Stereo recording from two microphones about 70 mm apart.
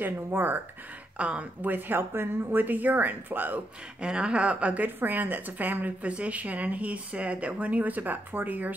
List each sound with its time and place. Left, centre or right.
0.0 s a woman's voice: right
1.1 s speech: centre
1.6 s a woman's voice: right
4.0 s a woman's voice: centre